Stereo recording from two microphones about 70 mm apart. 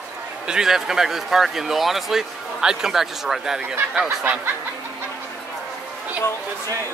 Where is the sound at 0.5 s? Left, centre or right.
Centre.